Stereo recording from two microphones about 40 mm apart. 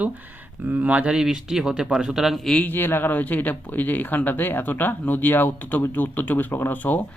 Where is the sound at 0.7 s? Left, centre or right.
Right.